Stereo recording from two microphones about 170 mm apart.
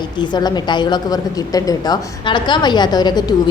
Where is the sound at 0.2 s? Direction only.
25° left (ahead or behind).